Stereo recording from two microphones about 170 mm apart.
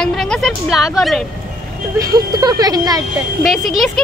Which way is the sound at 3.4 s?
Centre (ahead or behind).